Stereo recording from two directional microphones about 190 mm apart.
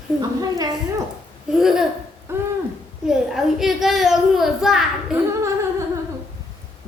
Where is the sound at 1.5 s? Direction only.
Centre (ahead or behind).